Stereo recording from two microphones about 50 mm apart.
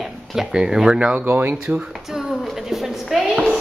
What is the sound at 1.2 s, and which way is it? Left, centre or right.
Speech, right.